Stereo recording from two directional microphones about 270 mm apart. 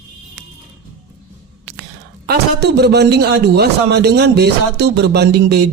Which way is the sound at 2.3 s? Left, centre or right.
Right.